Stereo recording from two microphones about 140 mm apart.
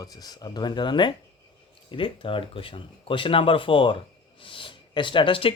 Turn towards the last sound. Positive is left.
turn(degrees=40)  # may be behind; listen again after turning